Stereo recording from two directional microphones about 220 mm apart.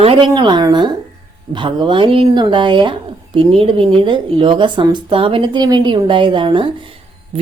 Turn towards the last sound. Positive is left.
turn(degrees=-20)  # may be behind; listen again after turning